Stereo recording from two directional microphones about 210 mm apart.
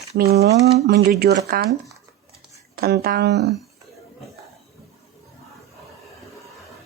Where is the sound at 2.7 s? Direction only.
45° right (ahead or behind).